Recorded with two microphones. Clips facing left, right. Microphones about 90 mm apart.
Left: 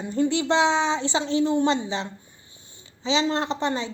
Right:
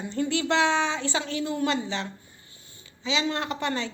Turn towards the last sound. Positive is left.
turn(degrees=20)  # may be behind; listen again after turning